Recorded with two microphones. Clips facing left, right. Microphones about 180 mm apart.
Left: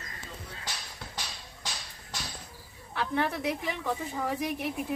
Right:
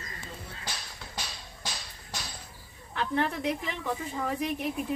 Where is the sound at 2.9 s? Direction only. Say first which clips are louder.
Right 1 dB; 5° left (ahead or behind).